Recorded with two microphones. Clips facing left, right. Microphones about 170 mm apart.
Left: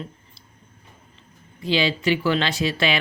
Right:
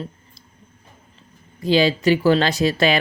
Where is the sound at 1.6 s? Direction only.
40° right (ahead or behind).